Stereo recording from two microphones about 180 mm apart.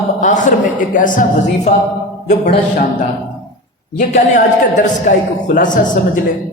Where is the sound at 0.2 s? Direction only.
45° left (ahead or behind).